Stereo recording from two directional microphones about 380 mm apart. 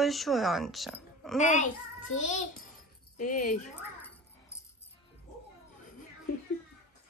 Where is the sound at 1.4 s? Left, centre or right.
Centre.